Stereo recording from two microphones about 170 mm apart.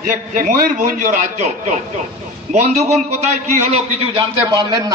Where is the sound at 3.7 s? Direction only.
35° right (ahead or behind).